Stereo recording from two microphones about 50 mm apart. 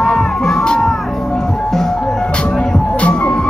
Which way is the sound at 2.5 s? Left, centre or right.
Left.